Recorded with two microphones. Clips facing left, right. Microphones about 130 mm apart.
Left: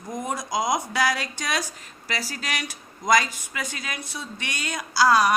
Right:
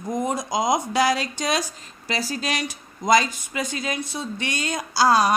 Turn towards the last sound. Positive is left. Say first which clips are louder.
# right 1 dB
turn(degrees=-25)  # may be behind; listen again after turning